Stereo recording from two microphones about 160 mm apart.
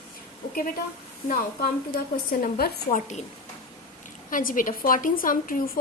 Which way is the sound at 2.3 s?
65° left (ahead or behind).